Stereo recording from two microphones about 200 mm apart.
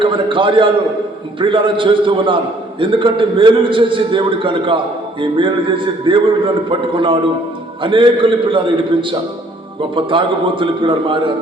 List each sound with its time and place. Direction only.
0.0 s a man's voice: 25° right (ahead or behind)